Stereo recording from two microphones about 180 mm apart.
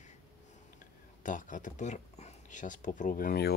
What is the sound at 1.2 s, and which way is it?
Speech, 45° left (ahead or behind).